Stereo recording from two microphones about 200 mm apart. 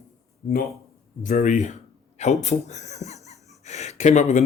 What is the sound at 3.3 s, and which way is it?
Gasp, 35° left (ahead or behind).